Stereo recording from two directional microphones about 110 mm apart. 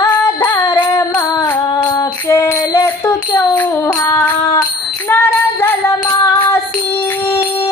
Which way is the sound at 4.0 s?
35° left (ahead or behind).